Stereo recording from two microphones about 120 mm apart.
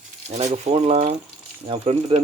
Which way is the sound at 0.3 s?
70° right (ahead or behind).